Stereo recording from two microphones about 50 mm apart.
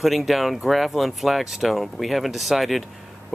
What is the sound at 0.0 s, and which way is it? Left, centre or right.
Speech, centre.